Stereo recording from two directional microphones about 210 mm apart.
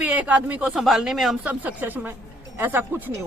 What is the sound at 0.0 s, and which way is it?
Speech, 5° right (ahead or behind).